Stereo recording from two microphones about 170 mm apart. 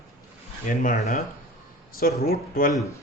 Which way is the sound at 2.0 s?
65° left (ahead or behind).